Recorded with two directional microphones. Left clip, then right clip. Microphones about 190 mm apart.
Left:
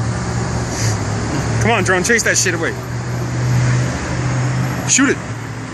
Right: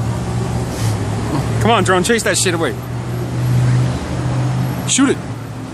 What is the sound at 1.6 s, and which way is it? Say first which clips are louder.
Speech: right 2 dB; 25° right (ahead or behind).